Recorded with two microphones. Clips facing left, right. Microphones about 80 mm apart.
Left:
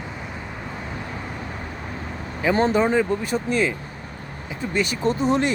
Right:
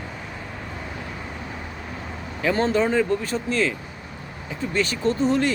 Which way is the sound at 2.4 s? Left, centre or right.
Centre.